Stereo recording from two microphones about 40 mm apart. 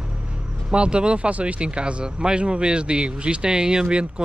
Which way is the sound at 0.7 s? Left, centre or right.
Right.